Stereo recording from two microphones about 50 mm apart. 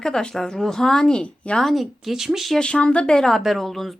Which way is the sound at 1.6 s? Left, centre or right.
Centre.